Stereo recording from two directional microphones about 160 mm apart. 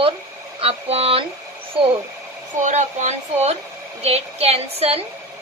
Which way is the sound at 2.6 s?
50° right (ahead or behind).